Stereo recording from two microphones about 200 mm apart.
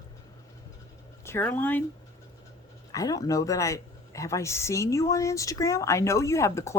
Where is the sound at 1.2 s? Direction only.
10° left (ahead or behind).